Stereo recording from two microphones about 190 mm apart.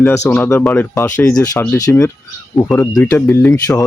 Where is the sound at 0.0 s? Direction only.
15° left (ahead or behind).